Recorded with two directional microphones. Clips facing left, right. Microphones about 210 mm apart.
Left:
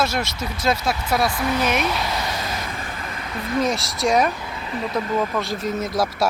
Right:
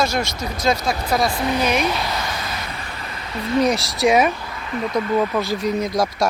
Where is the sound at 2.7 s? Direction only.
45° left (ahead or behind).